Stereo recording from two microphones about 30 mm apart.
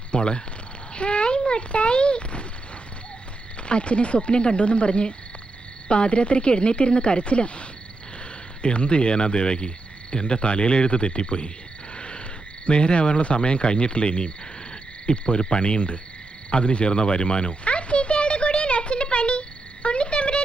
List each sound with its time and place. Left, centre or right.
0.1 s cricket: left
0.9 s speech: left
3.6 s cricket: left
11.9 s frog: left
12.6 s cricket: left
16.5 s a sound: left